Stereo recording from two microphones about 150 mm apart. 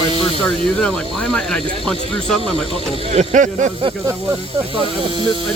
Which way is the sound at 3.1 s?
50° right (ahead or behind).